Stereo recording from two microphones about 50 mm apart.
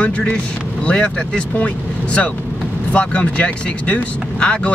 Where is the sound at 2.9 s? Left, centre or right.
Left.